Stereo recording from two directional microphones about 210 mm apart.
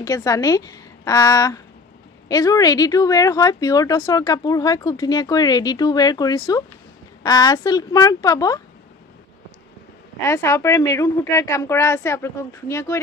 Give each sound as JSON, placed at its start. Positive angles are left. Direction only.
{"t": 0.0, "sound": "speech", "side_deg": 15}
{"t": 10.2, "sound": "speech", "side_deg": 15}